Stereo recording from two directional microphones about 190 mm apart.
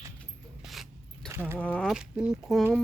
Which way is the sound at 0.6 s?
Centre (ahead or behind).